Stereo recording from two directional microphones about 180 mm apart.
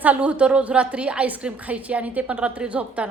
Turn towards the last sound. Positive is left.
turn(degrees=-5)  # may be behind; listen again after turning